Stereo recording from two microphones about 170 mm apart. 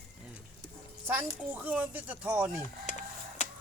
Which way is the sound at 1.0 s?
10° right (ahead or behind).